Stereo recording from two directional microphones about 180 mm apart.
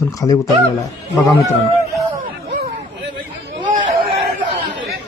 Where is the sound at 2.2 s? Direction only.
50° right (ahead or behind).